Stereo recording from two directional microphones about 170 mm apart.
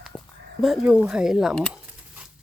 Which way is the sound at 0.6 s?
5° right (ahead or behind).